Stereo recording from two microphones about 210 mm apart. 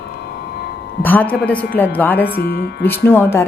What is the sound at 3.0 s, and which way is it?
Speech, 10° left (ahead or behind).